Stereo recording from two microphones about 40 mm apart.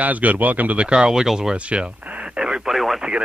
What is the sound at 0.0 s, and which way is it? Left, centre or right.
Speech, right.